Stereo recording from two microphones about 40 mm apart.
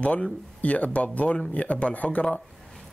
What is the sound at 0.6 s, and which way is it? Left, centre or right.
A man's voice, left.